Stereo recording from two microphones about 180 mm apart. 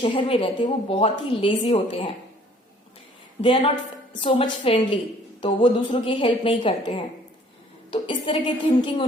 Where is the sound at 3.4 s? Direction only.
30° left (ahead or behind).